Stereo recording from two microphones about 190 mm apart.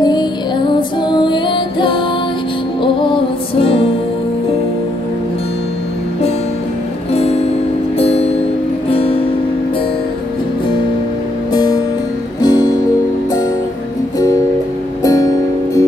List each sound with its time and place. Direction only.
0.0 s music: 20° left (ahead or behind)
7.1 s music: 30° left (ahead or behind)
11.5 s music: 20° left (ahead or behind)
15.0 s music: 20° left (ahead or behind)